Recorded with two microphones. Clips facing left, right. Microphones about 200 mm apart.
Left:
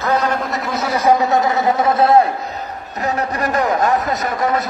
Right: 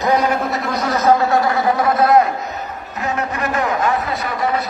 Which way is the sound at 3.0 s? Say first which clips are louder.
Left 2 dB; 35° left (ahead or behind).